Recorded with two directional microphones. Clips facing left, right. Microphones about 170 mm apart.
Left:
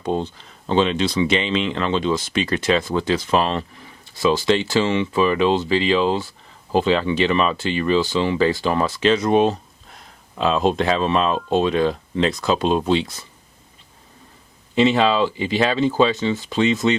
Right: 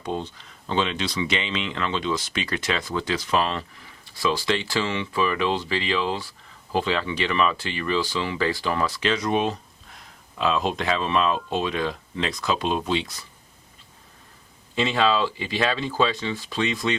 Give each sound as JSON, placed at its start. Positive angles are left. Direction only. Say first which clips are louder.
{"t": 0.0, "sound": "speech", "louder": "left 6 dB", "side_deg": 30}
{"t": 14.8, "sound": "speech", "louder": "left 5 dB", "side_deg": 25}